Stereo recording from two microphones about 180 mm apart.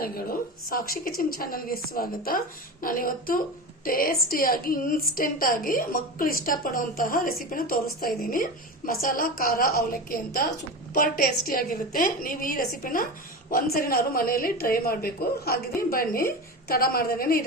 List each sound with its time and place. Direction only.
0.0 s a woman's voice: 55° left (ahead or behind)